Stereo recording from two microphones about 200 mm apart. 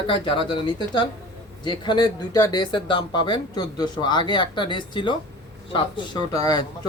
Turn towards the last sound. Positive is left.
turn(degrees=20)  # may be behind; listen again after turning